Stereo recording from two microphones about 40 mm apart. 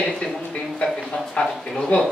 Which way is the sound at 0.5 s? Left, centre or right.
Left.